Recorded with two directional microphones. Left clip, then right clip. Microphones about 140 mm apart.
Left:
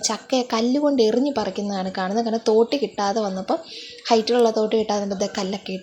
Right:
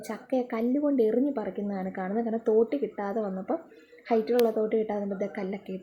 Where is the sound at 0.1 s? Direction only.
20° left (ahead or behind).